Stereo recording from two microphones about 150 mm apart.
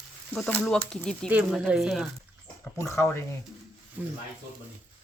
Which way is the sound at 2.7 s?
20° left (ahead or behind).